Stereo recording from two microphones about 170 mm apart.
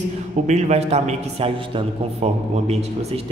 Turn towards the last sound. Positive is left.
turn(degrees=-40)  # may be behind; listen again after turning